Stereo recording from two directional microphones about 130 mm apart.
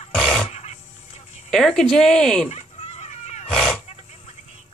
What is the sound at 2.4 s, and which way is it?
Fowl, 55° left (ahead or behind).